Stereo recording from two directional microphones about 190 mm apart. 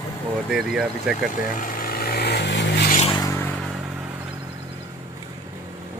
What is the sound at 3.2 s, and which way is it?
Vehicle, 15° left (ahead or behind).